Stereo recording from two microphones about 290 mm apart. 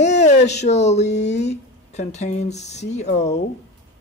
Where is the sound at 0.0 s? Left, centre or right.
Left.